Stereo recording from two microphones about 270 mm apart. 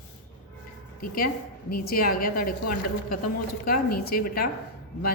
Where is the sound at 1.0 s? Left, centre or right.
Left.